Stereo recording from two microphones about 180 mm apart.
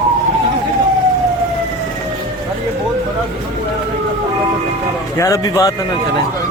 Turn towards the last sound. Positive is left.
turn(degrees=20)  # may be behind; listen again after turning